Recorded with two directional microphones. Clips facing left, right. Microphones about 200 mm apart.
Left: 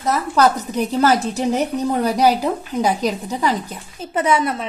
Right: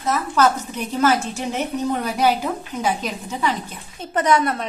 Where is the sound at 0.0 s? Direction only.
35° left (ahead or behind).